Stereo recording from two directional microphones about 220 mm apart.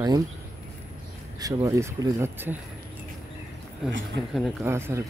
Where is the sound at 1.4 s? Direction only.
15° right (ahead or behind).